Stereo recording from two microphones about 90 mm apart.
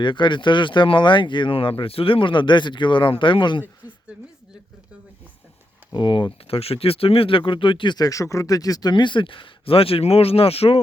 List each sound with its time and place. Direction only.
0.0 s speech: 65° left (ahead or behind)
5.9 s speech: 65° left (ahead or behind)
7.9 s speech: 40° left (ahead or behind); by 10.8 s 90° left